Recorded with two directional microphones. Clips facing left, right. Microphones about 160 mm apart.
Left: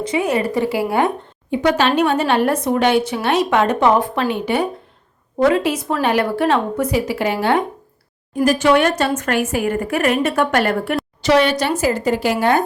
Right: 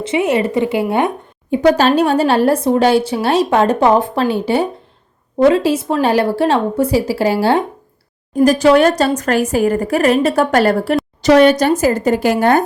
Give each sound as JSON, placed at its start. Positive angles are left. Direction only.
{"t": 0.0, "sound": "a woman's voice", "side_deg": -25}
{"t": 1.5, "sound": "a woman's voice", "side_deg": -40}